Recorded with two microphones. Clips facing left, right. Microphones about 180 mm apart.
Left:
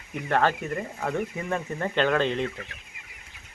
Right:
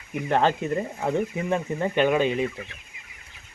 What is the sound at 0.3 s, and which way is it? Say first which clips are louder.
Speech: right 2 dB; 20° right (ahead or behind).